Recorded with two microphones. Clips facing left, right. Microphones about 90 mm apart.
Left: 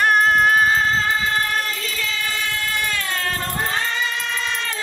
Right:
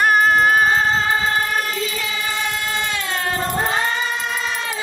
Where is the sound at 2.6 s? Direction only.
20° right (ahead or behind).